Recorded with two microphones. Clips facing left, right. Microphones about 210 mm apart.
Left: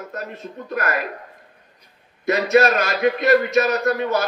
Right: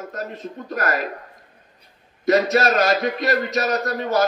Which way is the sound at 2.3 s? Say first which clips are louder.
Left 1 dB; 40° right (ahead or behind).